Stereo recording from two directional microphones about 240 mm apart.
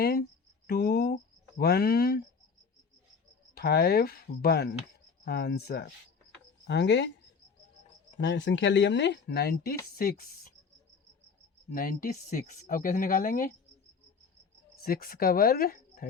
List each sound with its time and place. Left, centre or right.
0.0 s speech: left
3.5 s speech: left
8.2 s speech: left
11.7 s speech: left
14.8 s speech: left